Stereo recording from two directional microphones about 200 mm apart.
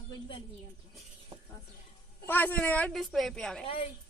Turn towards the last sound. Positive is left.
turn(degrees=5)  # may be behind; listen again after turning